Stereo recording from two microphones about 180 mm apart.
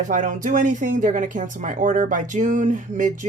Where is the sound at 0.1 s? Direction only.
45° right (ahead or behind).